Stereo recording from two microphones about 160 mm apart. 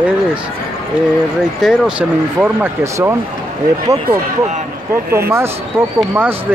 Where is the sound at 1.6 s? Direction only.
5° right (ahead or behind).